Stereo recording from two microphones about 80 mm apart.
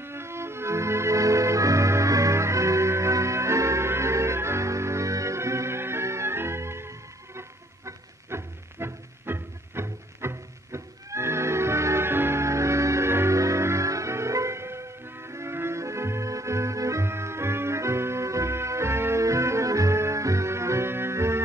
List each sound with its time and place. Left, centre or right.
0.0 s music: right